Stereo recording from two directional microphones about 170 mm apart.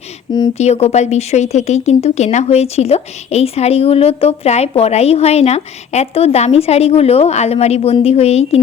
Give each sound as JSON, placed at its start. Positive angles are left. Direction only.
{"t": 0.5, "sound": "speech", "side_deg": 40}